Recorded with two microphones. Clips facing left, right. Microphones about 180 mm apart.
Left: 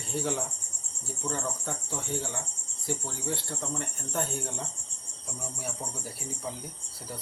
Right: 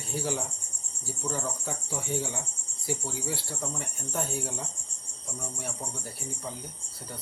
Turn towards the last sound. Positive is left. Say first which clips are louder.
# even
turn(degrees=0)  # may be behind; listen again after turning